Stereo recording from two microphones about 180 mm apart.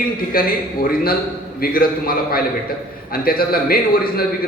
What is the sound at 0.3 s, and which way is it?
A man's voice, 55° left (ahead or behind).